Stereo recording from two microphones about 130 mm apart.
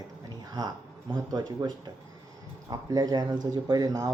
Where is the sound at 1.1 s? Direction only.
30° right (ahead or behind).